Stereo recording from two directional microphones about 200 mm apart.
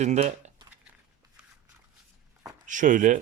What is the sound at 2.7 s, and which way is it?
Speech, 40° right (ahead or behind).